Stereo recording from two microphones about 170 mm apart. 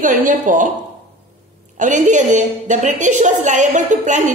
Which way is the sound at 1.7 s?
45° right (ahead or behind).